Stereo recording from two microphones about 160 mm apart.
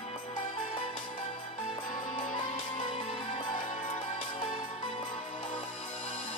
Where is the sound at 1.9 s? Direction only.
55° left (ahead or behind); by 4.9 s 35° left (ahead or behind).